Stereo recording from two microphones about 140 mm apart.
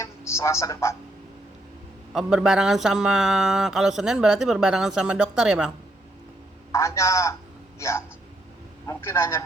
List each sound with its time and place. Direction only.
0.0 s speech: 20° left (ahead or behind)
2.1 s speech: 5° right (ahead or behind)
6.7 s a man's voice: 20° left (ahead or behind)